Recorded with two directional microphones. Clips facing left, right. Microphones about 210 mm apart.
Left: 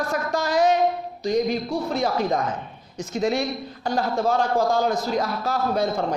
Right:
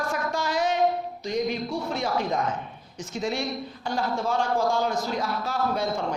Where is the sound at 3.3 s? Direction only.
40° left (ahead or behind).